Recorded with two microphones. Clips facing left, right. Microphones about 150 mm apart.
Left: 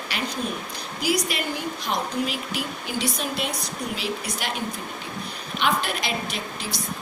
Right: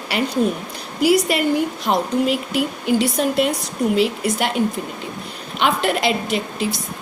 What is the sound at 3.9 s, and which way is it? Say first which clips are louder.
Speech: right 12 dB; 65° right (ahead or behind).